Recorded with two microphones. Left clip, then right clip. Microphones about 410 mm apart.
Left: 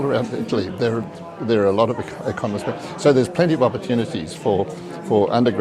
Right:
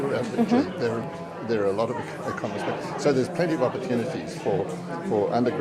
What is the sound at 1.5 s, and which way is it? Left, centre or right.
Speech, left.